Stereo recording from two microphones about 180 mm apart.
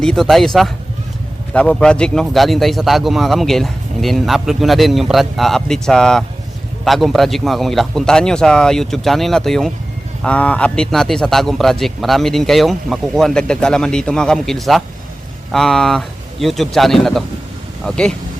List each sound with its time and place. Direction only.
0.0 s speech: centre (ahead or behind)